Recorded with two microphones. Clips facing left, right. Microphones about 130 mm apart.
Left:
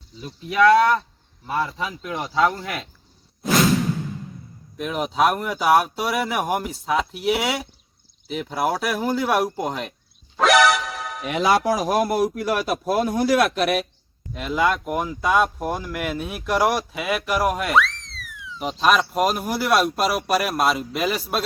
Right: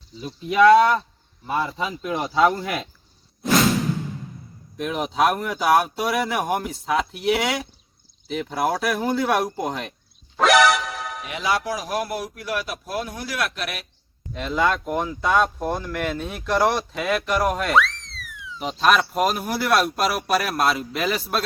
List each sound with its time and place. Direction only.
0.2 s speech: 20° right (ahead or behind)
4.8 s speech: centre (ahead or behind)
10.3 s music: centre (ahead or behind)
11.3 s a man's voice: 50° left (ahead or behind)
14.3 s speech: 5° left (ahead or behind)